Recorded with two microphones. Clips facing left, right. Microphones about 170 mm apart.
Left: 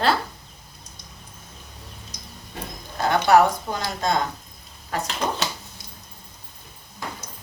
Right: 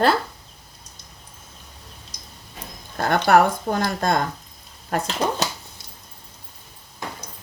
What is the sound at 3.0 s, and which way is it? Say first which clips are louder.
Speech: even; 55° right (ahead or behind).